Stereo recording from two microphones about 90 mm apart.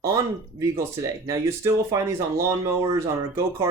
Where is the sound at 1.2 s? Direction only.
35° right (ahead or behind).